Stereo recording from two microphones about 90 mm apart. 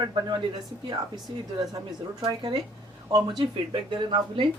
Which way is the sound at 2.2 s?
65° right (ahead or behind).